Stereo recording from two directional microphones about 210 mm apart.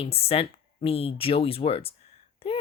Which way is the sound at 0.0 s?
30° left (ahead or behind).